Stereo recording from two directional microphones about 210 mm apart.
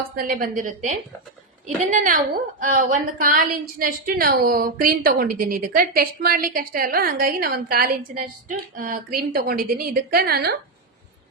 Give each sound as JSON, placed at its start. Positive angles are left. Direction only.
{"t": 0.2, "sound": "a woman's voice", "side_deg": -40}